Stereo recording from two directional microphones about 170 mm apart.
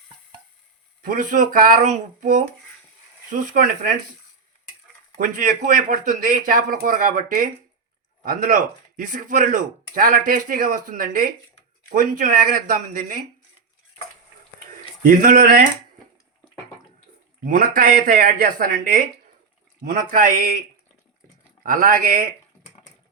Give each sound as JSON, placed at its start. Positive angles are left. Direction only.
{"t": 1.0, "sound": "speech", "side_deg": -50}
{"t": 5.2, "sound": "speech", "side_deg": -50}
{"t": 15.0, "sound": "speech", "side_deg": -55}
{"t": 17.4, "sound": "speech", "side_deg": -50}
{"t": 21.6, "sound": "speech", "side_deg": -55}